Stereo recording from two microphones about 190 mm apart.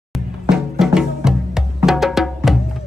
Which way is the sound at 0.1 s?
5° right (ahead or behind).